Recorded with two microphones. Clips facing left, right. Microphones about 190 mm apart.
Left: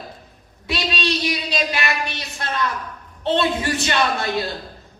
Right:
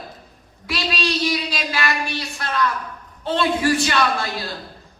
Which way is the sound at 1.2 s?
20° left (ahead or behind).